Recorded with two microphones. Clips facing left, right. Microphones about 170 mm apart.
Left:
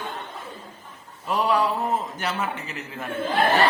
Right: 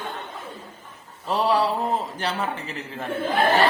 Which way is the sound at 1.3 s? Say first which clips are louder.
Right 1 dB; 35° right (ahead or behind).